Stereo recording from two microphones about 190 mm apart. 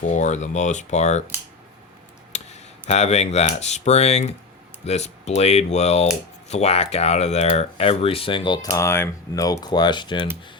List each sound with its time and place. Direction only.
0.2 s speech: 40° left (ahead or behind)
2.3 s speech: 35° left (ahead or behind)